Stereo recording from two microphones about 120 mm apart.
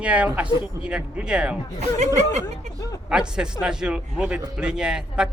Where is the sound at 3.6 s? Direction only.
5° right (ahead or behind).